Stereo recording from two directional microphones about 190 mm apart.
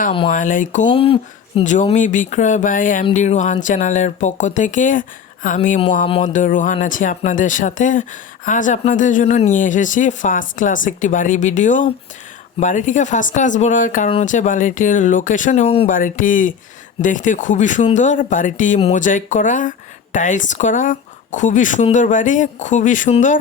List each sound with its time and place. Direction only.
0.3 s speech: 45° left (ahead or behind)
0.9 s speech: 30° left (ahead or behind)
15.9 s speech: 45° left (ahead or behind)